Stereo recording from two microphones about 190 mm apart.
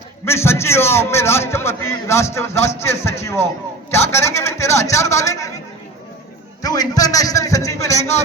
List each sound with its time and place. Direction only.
0.3 s a man's voice: 15° left (ahead or behind)
6.6 s a man's voice: 20° left (ahead or behind)